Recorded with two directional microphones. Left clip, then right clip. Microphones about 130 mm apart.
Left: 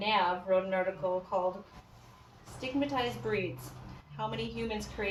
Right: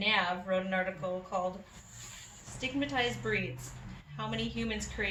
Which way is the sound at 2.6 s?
15° left (ahead or behind).